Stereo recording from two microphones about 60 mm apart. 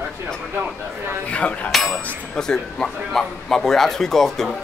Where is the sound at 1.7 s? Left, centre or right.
Centre.